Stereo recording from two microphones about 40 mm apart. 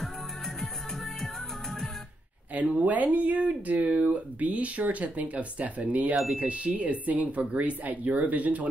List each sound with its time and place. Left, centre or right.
2.5 s speech: right